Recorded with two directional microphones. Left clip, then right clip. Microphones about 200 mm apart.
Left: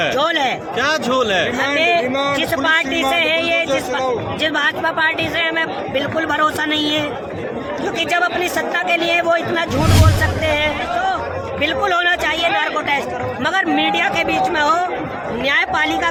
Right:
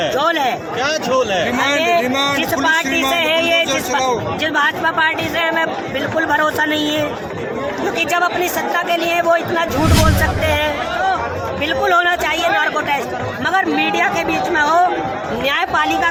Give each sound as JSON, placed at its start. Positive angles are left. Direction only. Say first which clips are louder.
{"t": 0.1, "sound": "speech", "louder": "right 1 dB", "side_deg": 10}
{"t": 0.8, "sound": "speech", "louder": "left 1 dB", "side_deg": 50}
{"t": 2.6, "sound": "a man's voice", "louder": "even", "side_deg": 15}